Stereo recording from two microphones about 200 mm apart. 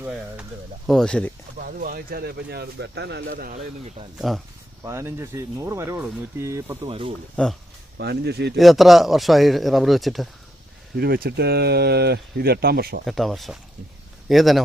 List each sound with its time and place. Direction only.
0.0 s a man's voice: 5° right (ahead or behind)
1.6 s speech: 45° right (ahead or behind)
4.2 s a man's voice: centre (ahead or behind)
4.8 s speech: 15° right (ahead or behind)
7.4 s a man's voice: 5° left (ahead or behind)
7.9 s speech: 55° right (ahead or behind)
8.5 s a man's voice: centre (ahead or behind)
10.9 s speech: 50° right (ahead or behind)
13.1 s a man's voice: centre (ahead or behind)